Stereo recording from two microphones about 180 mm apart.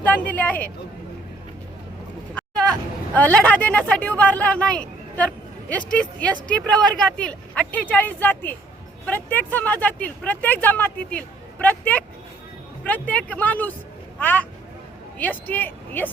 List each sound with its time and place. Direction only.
0.0 s speech: 10° left (ahead or behind)
2.3 s a sound: 5° left (ahead or behind)
3.2 s a woman's voice: 10° left (ahead or behind)